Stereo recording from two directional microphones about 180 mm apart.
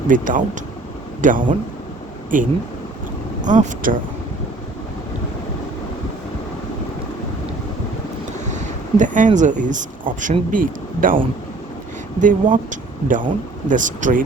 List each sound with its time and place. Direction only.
0.1 s speech: 45° right (ahead or behind)
8.4 s speech: 40° right (ahead or behind)
12.2 s speech: 45° right (ahead or behind)